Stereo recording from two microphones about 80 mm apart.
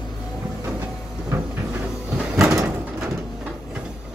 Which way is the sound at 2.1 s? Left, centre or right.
Centre.